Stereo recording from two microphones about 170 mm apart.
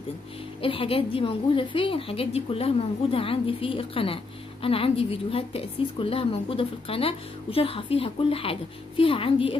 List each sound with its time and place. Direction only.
0.6 s a woman's voice: 35° left (ahead or behind)